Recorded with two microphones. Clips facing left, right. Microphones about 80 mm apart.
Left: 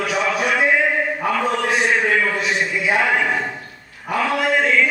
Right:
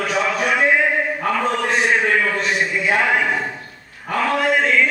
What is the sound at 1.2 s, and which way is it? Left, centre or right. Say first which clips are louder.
Mantra: even; centre.